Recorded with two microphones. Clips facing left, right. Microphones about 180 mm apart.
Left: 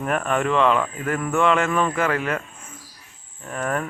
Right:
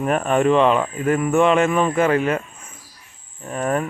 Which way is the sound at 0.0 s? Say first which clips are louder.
Right 5 dB; 25° right (ahead or behind).